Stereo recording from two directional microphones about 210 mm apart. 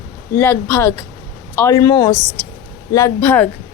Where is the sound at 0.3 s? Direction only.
10° left (ahead or behind).